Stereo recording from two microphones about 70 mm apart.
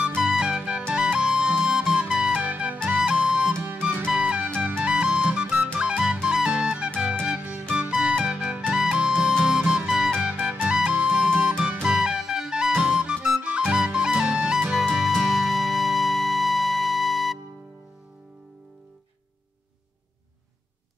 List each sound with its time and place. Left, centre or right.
0.2 s music: centre
3.5 s music: right
4.1 s music: centre
10.2 s music: right
11.5 s music: right
11.8 s music: centre